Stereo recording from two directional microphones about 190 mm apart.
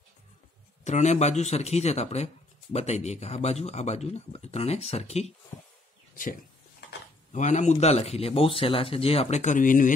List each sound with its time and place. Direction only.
0.8 s speech: 40° left (ahead or behind)
7.3 s speech: 40° left (ahead or behind)